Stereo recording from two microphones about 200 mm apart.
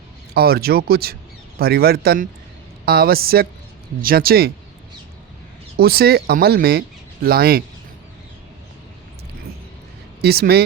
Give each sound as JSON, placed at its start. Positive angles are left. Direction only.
{"t": 0.3, "sound": "speech", "side_deg": -50}
{"t": 5.7, "sound": "speech", "side_deg": -50}
{"t": 10.2, "sound": "speech", "side_deg": -50}